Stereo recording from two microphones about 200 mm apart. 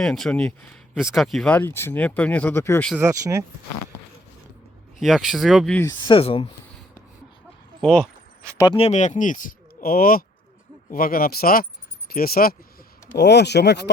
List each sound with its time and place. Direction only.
0.0 s speech: 5° left (ahead or behind)
3.0 s speech: 15° right (ahead or behind)
4.9 s speech: centre (ahead or behind)
6.1 s speech: 25° left (ahead or behind)
7.8 s speech: 5° left (ahead or behind)
8.5 s speech: 20° left (ahead or behind)
8.8 s speech: 35° left (ahead or behind); by 13.9 s 55° left (ahead or behind)